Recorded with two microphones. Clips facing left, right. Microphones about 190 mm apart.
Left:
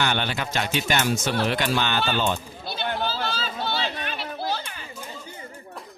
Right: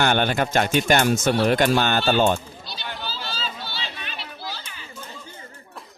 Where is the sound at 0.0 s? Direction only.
50° right (ahead or behind).